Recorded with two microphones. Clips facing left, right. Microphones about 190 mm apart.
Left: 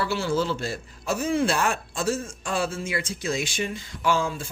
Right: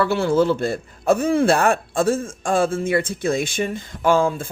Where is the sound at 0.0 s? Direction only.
55° right (ahead or behind).